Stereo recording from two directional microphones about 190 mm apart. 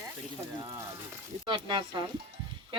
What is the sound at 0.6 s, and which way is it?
Speech, 20° right (ahead or behind).